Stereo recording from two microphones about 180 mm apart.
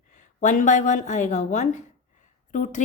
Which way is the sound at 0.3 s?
45° left (ahead or behind).